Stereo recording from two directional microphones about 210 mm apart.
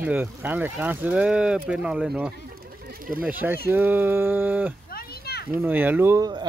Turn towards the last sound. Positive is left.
turn(degrees=-20)  # may be behind; listen again after turning